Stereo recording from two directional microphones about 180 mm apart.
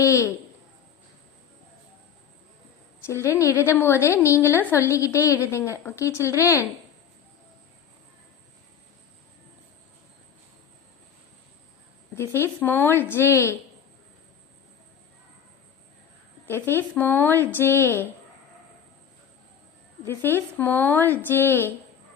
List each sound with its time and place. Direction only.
0.0 s a woman's voice: 15° left (ahead or behind)
3.1 s a woman's voice: 15° left (ahead or behind)
12.1 s a woman's voice: 15° left (ahead or behind)
16.5 s a woman's voice: 15° left (ahead or behind)
20.1 s a woman's voice: 10° left (ahead or behind)